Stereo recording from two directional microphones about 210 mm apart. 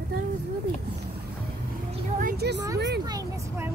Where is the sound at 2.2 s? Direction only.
50° right (ahead or behind).